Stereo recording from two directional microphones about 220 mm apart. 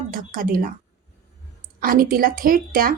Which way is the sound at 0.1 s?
40° right (ahead or behind).